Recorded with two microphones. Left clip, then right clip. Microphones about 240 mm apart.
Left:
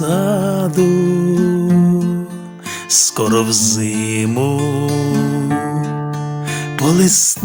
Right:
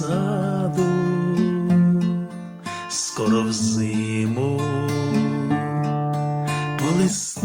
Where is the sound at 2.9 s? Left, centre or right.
Left.